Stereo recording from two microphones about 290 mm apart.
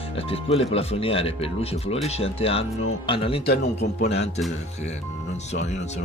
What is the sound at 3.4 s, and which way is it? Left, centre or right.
Speech, left.